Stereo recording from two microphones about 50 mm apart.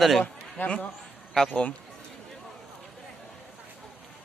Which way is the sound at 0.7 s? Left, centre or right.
Left.